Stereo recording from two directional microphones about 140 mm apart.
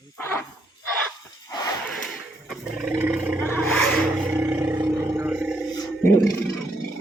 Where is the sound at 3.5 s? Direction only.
5° left (ahead or behind).